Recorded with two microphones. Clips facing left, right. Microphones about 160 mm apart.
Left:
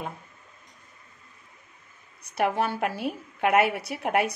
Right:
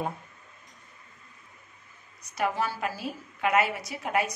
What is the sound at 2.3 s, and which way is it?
A woman's voice, 60° left (ahead or behind).